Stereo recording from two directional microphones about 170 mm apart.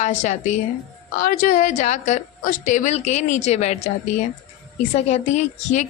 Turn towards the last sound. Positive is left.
turn(degrees=45)  # may be behind; listen again after turning